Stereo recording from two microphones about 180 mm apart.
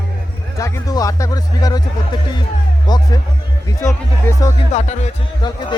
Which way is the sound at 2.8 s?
25° left (ahead or behind).